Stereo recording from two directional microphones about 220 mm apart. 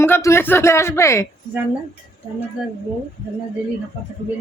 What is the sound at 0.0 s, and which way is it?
Speech, 10° left (ahead or behind).